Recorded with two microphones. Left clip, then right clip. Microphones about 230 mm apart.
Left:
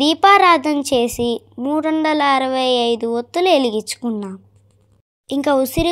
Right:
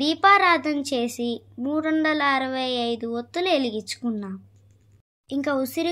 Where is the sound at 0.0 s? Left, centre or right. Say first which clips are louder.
Left 6 dB; left.